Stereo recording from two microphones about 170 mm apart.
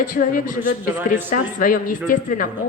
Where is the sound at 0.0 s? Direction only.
50° left (ahead or behind).